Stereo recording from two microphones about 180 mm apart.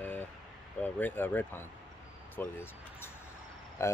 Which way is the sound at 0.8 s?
10° left (ahead or behind).